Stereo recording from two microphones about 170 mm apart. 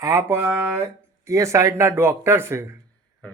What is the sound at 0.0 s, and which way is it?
Speech, 20° right (ahead or behind).